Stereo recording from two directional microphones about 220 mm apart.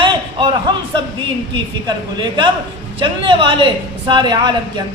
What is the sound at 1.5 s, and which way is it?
A woman's voice, 20° right (ahead or behind).